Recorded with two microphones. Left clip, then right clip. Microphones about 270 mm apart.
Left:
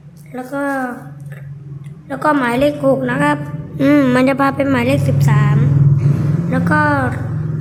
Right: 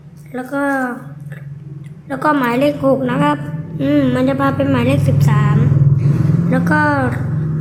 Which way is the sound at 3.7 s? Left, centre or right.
Left.